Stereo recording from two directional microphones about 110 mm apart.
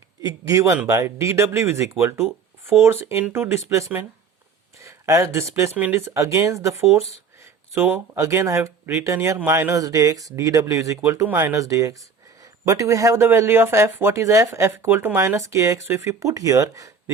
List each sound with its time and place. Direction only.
0.2 s speech: 35° right (ahead or behind)